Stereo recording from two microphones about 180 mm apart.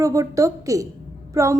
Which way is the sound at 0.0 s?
20° right (ahead or behind).